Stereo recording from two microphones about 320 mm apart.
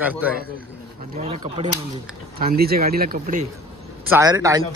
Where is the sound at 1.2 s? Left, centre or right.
Centre.